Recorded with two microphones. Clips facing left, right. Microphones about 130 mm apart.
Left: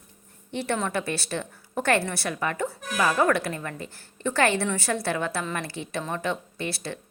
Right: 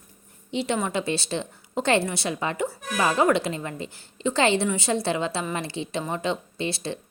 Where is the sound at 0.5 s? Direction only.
15° right (ahead or behind).